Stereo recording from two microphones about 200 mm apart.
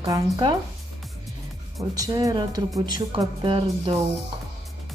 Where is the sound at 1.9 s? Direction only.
15° right (ahead or behind).